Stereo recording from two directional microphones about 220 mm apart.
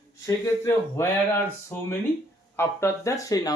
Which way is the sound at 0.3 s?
15° left (ahead or behind).